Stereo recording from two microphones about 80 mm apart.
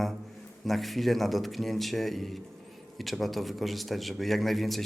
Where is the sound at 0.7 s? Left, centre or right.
Centre.